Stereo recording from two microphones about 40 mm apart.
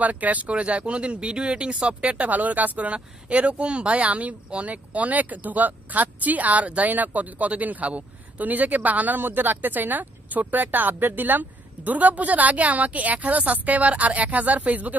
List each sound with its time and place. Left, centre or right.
0.0 s speech: right